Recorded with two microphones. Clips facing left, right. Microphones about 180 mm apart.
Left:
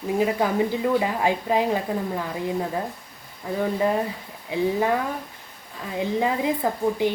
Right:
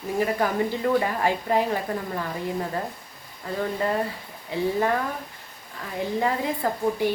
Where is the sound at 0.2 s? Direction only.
15° left (ahead or behind).